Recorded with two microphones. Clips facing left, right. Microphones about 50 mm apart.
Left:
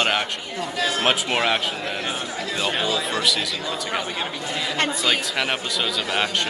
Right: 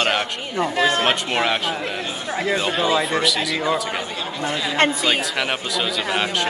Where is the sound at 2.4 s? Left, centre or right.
Right.